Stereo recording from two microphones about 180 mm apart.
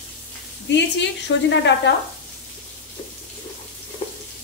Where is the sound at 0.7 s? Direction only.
75° left (ahead or behind).